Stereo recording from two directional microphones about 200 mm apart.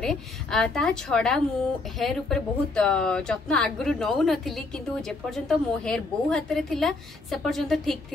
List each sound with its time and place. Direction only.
0.0 s a woman's voice: 5° left (ahead or behind)